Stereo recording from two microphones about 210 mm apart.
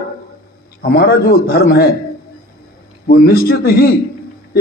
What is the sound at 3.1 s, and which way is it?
Speech, 45° left (ahead or behind).